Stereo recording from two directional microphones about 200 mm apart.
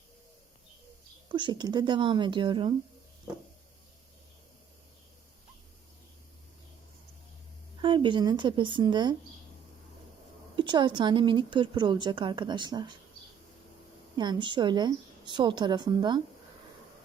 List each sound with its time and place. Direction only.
1.3 s a woman's voice: 25° right (ahead or behind)
7.8 s a woman's voice: 25° right (ahead or behind)
10.5 s a woman's voice: 25° right (ahead or behind)
14.2 s a woman's voice: 25° right (ahead or behind)